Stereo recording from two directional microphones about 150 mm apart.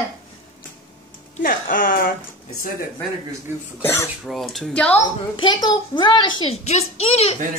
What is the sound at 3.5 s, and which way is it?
Speech, 15° right (ahead or behind).